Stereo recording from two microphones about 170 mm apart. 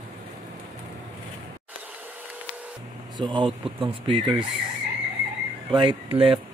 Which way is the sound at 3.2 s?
30° right (ahead or behind).